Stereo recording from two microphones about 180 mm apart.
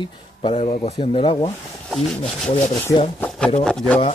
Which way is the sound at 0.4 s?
30° left (ahead or behind).